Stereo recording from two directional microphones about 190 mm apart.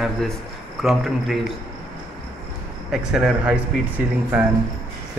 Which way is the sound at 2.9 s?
5° right (ahead or behind).